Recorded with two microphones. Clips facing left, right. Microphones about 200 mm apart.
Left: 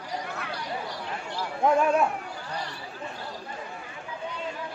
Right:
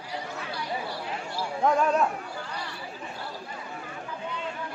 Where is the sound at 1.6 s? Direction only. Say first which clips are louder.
Left 2 dB; 10° left (ahead or behind).